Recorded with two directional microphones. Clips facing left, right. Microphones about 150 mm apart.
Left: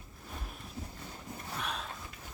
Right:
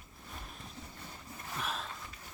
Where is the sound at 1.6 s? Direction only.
Centre (ahead or behind).